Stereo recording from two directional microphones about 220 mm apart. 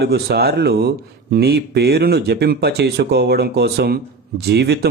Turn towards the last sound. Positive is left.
turn(degrees=-50)  # may be behind; listen again after turning